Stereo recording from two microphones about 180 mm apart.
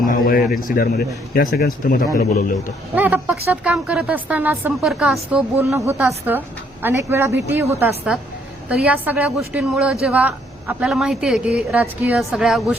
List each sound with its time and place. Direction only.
0.0 s a man's voice: 50° left (ahead or behind)
2.9 s a woman's voice: 10° right (ahead or behind)
7.8 s a woman's voice: 5° right (ahead or behind)